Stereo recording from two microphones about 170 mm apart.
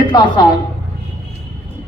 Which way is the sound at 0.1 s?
25° left (ahead or behind).